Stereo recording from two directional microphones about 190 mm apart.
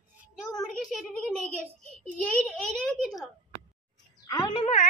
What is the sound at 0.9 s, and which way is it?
Speech, 5° left (ahead or behind).